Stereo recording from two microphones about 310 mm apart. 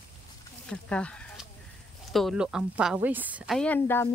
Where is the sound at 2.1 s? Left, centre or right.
Centre.